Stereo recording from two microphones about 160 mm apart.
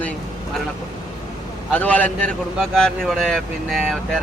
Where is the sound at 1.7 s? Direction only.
10° left (ahead or behind).